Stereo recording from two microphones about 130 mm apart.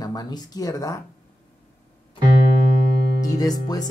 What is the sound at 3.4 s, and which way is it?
Speech, 30° left (ahead or behind).